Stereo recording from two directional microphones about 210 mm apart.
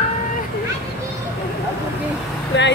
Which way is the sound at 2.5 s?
55° left (ahead or behind).